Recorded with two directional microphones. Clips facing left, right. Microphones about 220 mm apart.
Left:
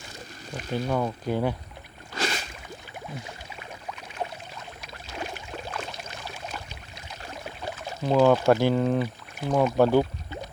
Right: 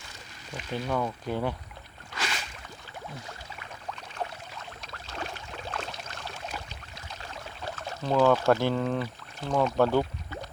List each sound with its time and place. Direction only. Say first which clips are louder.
0.5 s speech: left 4 dB; 45° left (ahead or behind)
0.9 s speech: left 2 dB; 10° left (ahead or behind)
2.1 s a sound: left 5 dB; 40° left (ahead or behind)
4.9 s boat: left 3 dB; 10° left (ahead or behind)
6.1 s a sound: left 2 dB; 5° left (ahead or behind)
7.4 s speech: left 2 dB; 15° left (ahead or behind)